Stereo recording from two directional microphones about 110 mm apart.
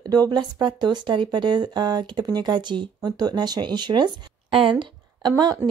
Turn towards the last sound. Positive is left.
turn(degrees=-40)  # may be behind; listen again after turning